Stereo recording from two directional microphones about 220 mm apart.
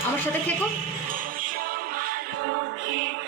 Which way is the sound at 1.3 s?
40° right (ahead or behind).